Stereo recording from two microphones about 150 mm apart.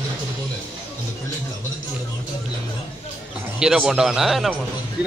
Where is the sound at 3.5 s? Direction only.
5° right (ahead or behind).